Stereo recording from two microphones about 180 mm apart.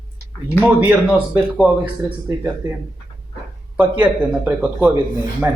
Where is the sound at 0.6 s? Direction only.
10° right (ahead or behind).